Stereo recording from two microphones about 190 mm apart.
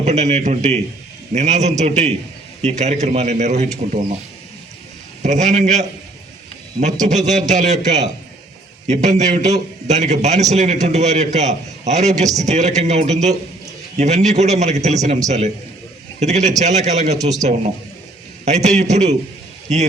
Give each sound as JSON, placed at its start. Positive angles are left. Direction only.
{"t": 0.0, "sound": "a man's voice", "side_deg": -35}
{"t": 5.2, "sound": "a man's voice", "side_deg": -40}
{"t": 7.0, "sound": "a man's voice", "side_deg": -40}